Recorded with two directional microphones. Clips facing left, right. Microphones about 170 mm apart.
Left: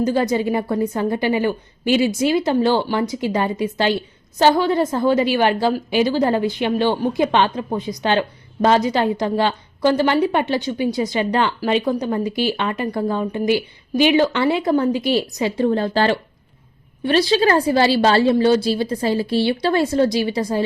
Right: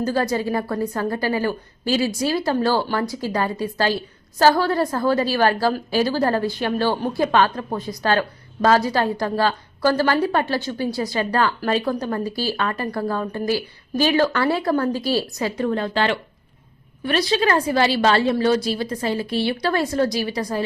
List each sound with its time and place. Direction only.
0.0 s a woman's voice: 20° left (ahead or behind)